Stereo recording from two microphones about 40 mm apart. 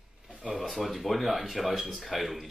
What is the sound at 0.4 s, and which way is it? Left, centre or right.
Speech, centre.